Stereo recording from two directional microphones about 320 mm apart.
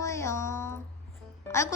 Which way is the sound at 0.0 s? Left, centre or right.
Centre.